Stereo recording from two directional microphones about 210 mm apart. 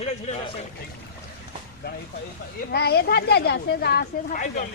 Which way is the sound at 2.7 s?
50° left (ahead or behind).